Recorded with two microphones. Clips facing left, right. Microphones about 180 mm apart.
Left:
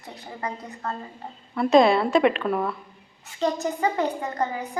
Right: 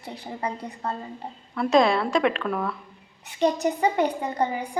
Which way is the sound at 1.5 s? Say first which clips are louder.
Left 3 dB; centre (ahead or behind).